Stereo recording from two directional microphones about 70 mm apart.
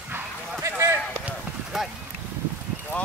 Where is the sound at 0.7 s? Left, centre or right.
Right.